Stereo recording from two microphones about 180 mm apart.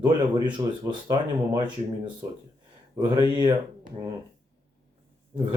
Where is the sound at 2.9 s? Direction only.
20° right (ahead or behind).